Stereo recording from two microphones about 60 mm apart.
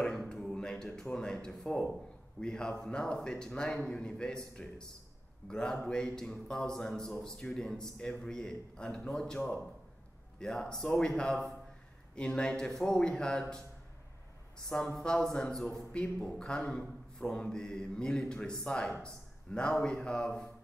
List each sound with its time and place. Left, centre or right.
0.3 s a sound: centre
1.1 s a man's voice: centre
4.6 s speech: left
5.5 s a man's voice: centre
10.4 s a man's voice: centre
14.7 s a man's voice: centre